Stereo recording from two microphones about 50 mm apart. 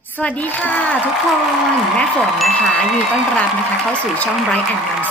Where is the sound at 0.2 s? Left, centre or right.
Left.